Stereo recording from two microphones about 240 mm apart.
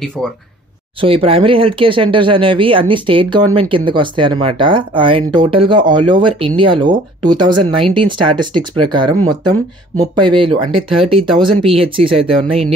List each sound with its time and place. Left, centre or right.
1.0 s speech: right